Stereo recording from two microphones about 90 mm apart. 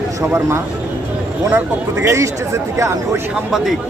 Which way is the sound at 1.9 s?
35° right (ahead or behind).